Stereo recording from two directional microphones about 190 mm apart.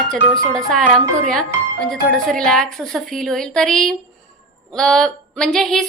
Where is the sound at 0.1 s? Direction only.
5° left (ahead or behind).